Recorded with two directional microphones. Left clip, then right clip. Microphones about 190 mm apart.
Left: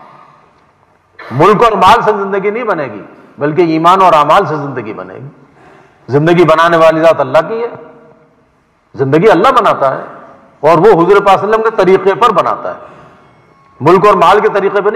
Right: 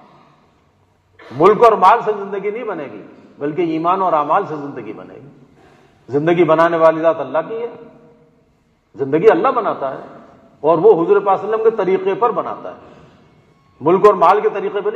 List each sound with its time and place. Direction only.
1.1 s a man's voice: 30° left (ahead or behind)
8.9 s a man's voice: 25° left (ahead or behind)
13.7 s a man's voice: 30° left (ahead or behind)